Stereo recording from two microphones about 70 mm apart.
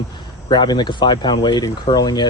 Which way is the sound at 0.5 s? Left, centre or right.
Left.